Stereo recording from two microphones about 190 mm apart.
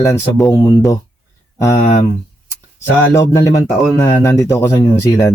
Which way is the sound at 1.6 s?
15° left (ahead or behind).